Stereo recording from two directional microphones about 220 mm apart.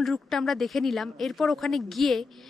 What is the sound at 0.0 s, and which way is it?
Speech, centre (ahead or behind).